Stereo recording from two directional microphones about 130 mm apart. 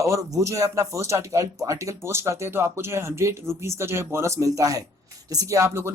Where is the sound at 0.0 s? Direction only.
25° right (ahead or behind).